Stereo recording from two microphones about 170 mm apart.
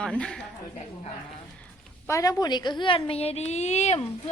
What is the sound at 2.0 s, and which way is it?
A woman's voice, 20° left (ahead or behind).